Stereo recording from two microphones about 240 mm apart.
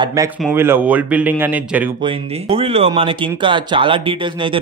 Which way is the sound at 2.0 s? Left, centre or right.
Right.